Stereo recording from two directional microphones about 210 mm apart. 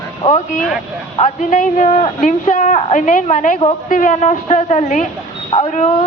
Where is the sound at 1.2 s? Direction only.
35° left (ahead or behind).